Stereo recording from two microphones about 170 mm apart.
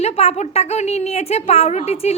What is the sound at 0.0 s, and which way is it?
A woman's voice, 40° left (ahead or behind).